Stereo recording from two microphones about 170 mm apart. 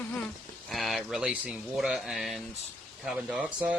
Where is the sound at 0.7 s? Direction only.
Centre (ahead or behind).